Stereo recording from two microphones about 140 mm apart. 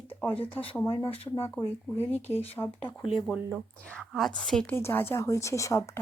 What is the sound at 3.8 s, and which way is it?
Speech, 5° left (ahead or behind).